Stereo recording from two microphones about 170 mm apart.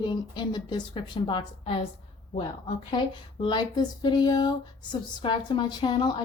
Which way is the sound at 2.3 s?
30° left (ahead or behind).